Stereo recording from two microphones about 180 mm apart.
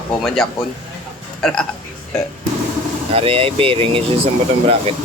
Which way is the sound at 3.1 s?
30° right (ahead or behind).